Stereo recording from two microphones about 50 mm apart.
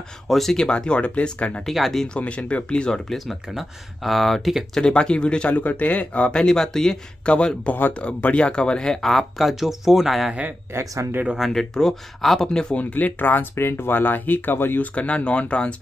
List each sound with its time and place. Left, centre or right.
0.3 s speech: centre
0.7 s speech: centre
1.6 s speech: centre
2.0 s speech: left
3.1 s speech: centre
4.7 s speech: centre
5.6 s speech: left; by 7.0 s centre
7.2 s speech: left
9.1 s speech: centre
10.7 s speech: right
11.5 s speech: centre
12.9 s speech: left
15.0 s speech: left